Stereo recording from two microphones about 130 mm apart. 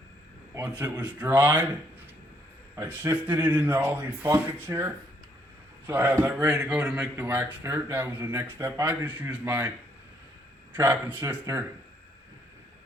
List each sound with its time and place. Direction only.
0.6 s speech: 10° right (ahead or behind)
2.7 s speech: 15° right (ahead or behind)
7.2 s speech: 15° right (ahead or behind)
10.8 s speech: 15° right (ahead or behind)